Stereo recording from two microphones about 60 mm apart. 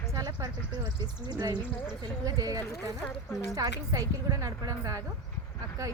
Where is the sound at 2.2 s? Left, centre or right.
Right.